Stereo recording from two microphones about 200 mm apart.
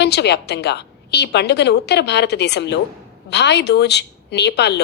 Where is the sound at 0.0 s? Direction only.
55° left (ahead or behind).